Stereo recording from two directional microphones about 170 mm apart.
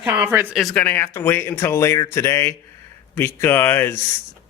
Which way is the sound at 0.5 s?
5° left (ahead or behind).